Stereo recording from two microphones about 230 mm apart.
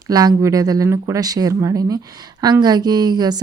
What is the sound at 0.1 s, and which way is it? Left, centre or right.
A woman's voice, centre.